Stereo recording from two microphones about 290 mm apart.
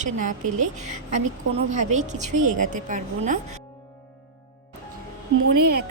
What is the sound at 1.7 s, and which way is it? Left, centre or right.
A woman's voice, right.